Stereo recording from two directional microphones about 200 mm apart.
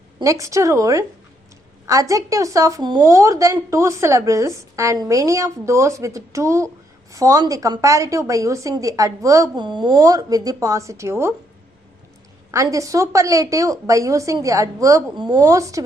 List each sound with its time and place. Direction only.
0.2 s a woman's voice: 15° right (ahead or behind)
12.5 s a woman's voice: 15° right (ahead or behind)